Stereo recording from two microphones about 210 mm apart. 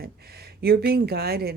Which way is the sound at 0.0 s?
50° right (ahead or behind).